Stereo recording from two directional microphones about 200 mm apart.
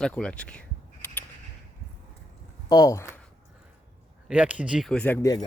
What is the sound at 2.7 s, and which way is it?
Speech, 15° left (ahead or behind).